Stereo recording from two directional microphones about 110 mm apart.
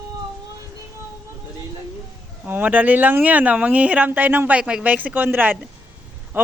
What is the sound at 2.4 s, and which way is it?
Speech, 15° right (ahead or behind).